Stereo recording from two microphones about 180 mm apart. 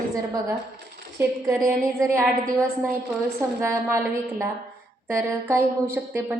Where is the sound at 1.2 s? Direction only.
15° right (ahead or behind).